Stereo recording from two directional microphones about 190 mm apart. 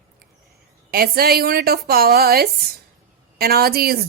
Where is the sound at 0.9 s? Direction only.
50° right (ahead or behind).